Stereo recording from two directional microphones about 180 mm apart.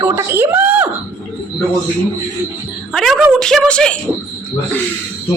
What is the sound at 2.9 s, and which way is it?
A woman's voice, centre (ahead or behind).